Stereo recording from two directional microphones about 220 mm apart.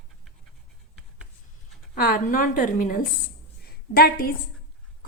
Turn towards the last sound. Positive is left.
turn(degrees=40)  # may be behind; listen again after turning